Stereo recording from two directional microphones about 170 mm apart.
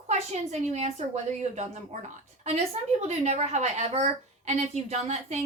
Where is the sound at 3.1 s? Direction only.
40° right (ahead or behind).